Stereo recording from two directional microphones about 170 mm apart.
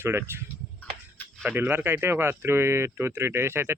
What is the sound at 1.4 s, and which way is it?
Speech, 10° right (ahead or behind).